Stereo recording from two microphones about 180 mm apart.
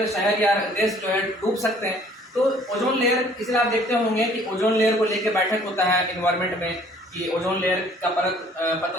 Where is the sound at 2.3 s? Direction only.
Centre (ahead or behind).